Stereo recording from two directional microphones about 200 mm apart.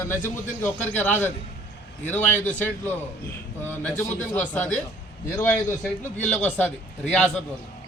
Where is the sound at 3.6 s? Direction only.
10° left (ahead or behind).